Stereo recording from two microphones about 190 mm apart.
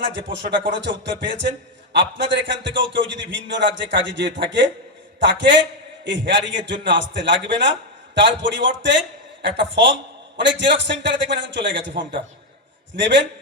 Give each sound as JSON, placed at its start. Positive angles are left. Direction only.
{"t": 0.0, "sound": "a man's voice", "side_deg": -70}